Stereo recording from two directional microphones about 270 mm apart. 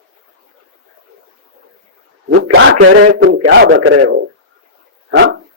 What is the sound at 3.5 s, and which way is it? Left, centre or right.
Speech, right.